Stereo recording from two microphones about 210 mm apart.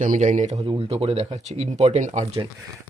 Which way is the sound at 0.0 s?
35° right (ahead or behind).